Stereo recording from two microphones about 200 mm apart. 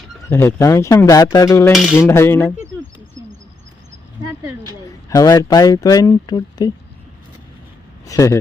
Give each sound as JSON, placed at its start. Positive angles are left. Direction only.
{"t": 0.3, "sound": "speech", "side_deg": 10}
{"t": 1.7, "sound": "cutlery", "side_deg": 0}
{"t": 2.0, "sound": "speech", "side_deg": 10}
{"t": 5.0, "sound": "speech", "side_deg": 20}
{"t": 8.0, "sound": "speech", "side_deg": 15}